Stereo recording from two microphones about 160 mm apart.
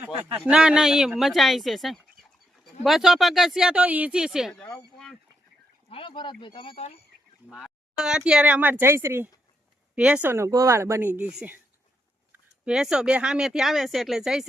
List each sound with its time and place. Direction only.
0.3 s speech: 5° right (ahead or behind)
5.9 s speech: 30° left (ahead or behind)
7.5 s speech: 5° right (ahead or behind)